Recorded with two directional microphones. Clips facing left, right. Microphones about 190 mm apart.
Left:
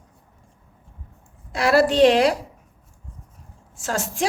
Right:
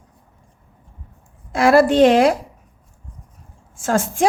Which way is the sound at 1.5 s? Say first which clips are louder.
Right 4 dB; 50° right (ahead or behind).